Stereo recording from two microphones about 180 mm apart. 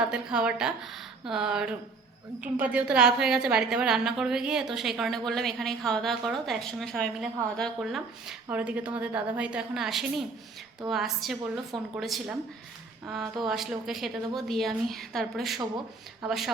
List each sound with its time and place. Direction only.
0.1 s a woman's voice: 5° right (ahead or behind)